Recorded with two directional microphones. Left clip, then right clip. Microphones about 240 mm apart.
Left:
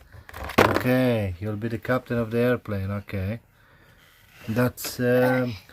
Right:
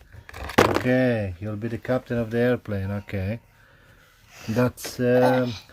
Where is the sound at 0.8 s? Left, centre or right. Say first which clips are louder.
Right 1 dB; centre.